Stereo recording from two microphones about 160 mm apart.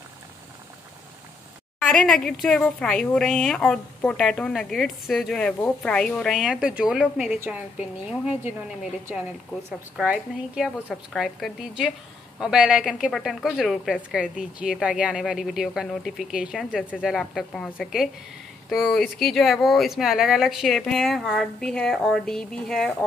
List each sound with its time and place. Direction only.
1.8 s a woman's voice: 5° left (ahead or behind)
7.3 s a woman's voice: 15° right (ahead or behind); by 23.0 s centre (ahead or behind)